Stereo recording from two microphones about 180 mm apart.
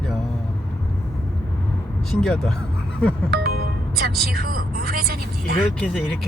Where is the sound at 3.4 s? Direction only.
60° right (ahead or behind).